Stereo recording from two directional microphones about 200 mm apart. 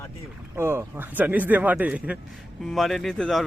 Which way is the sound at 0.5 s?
10° right (ahead or behind).